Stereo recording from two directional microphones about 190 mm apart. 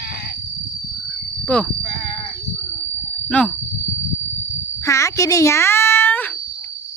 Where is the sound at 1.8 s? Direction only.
30° left (ahead or behind).